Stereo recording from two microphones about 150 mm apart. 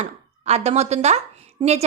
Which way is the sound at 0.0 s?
45° right (ahead or behind).